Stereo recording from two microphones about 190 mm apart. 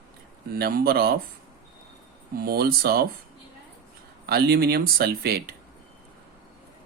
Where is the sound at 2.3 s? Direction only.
55° right (ahead or behind).